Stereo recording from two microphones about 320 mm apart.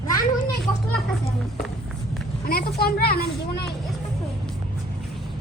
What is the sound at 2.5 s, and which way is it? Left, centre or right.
Speech, left.